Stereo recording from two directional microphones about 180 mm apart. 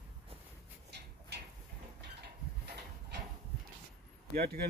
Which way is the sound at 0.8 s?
65° right (ahead or behind).